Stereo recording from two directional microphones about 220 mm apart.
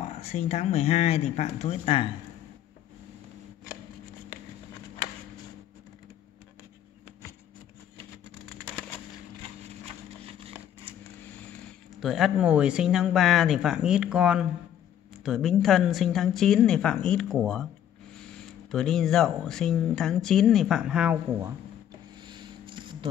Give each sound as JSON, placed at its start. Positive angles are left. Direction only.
{"t": 0.0, "sound": "speech", "side_deg": 30}
{"t": 12.0, "sound": "speech", "side_deg": 0}
{"t": 22.2, "sound": "a sound", "side_deg": -20}